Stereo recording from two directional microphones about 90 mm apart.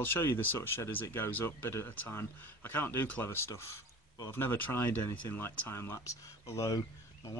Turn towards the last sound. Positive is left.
turn(degrees=35)  # may be behind; listen again after turning